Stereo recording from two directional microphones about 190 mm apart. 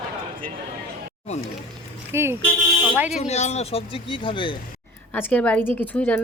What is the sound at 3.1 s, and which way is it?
Speech, 35° left (ahead or behind).